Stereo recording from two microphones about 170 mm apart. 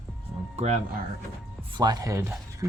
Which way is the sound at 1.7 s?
20° right (ahead or behind).